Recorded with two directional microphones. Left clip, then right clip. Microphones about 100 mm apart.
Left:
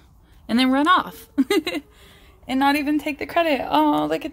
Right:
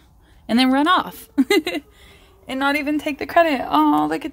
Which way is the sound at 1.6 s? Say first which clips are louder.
Right 2 dB; 20° right (ahead or behind).